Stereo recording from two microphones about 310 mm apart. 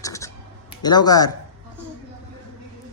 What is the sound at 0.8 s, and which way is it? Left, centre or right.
Speech, centre.